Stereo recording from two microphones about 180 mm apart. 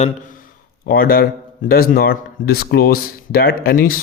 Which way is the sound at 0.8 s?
55° left (ahead or behind).